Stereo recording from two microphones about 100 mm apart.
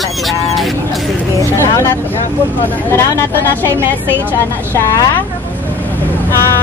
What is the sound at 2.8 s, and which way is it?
Speech, 25° left (ahead or behind).